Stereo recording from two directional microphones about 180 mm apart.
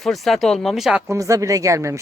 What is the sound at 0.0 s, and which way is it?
Speech, centre (ahead or behind).